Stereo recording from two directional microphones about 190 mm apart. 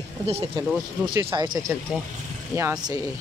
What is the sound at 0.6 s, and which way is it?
Speech, 25° right (ahead or behind).